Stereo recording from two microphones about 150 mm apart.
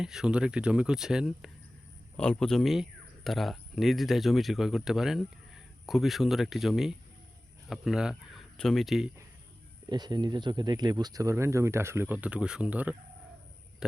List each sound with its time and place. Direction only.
0.0 s speech: 5° right (ahead or behind)
9.9 s speech: 30° right (ahead or behind); by 13.0 s 10° right (ahead or behind)